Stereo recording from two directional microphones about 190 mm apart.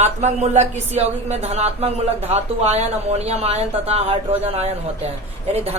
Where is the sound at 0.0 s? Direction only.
35° right (ahead or behind).